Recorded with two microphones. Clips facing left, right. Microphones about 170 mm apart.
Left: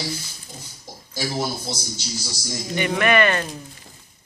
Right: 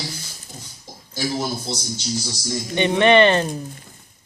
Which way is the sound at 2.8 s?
25° right (ahead or behind).